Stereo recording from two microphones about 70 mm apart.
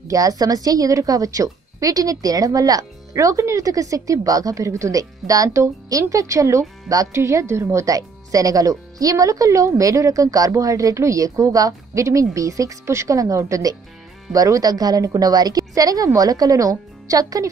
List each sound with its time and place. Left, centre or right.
0.1 s a woman's voice: right